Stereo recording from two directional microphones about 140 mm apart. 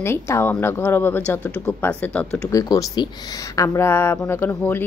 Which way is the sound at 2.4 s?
25° left (ahead or behind).